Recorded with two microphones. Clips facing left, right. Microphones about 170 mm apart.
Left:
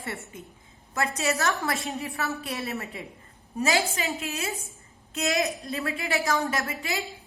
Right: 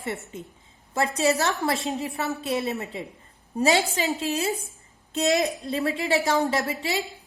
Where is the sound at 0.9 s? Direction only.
30° right (ahead or behind).